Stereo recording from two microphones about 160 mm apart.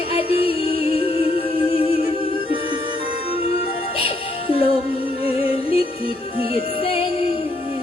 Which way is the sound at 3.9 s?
35° left (ahead or behind).